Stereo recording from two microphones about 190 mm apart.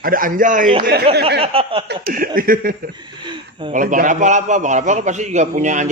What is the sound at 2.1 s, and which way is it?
Speech, 50° right (ahead or behind).